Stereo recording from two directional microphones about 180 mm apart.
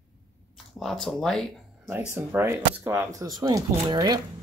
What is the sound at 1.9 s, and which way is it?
Speech, 10° right (ahead or behind).